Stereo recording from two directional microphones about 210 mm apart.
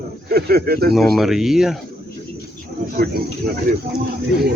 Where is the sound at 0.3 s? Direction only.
50° right (ahead or behind).